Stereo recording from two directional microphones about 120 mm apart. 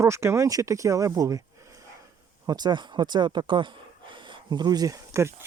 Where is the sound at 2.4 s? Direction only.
35° right (ahead or behind).